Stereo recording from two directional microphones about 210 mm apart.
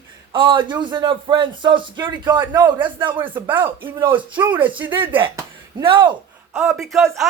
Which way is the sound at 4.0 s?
25° right (ahead or behind).